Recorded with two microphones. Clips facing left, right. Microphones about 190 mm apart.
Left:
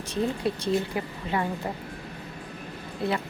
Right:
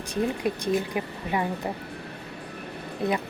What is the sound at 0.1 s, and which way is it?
Speech, 15° right (ahead or behind).